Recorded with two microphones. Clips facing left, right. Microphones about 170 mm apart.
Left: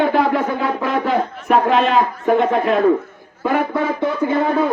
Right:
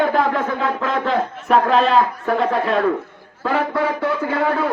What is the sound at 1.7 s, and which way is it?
Speech, 35° right (ahead or behind).